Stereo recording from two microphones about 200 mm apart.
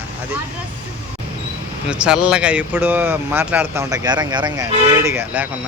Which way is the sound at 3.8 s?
20° right (ahead or behind).